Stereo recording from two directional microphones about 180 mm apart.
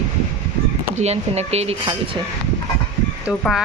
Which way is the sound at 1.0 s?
35° right (ahead or behind).